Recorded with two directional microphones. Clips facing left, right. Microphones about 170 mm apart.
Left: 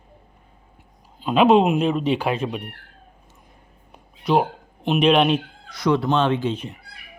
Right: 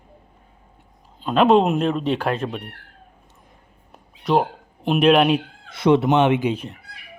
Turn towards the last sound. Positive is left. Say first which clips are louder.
# right 3 dB
turn(degrees=-15)  # may be behind; listen again after turning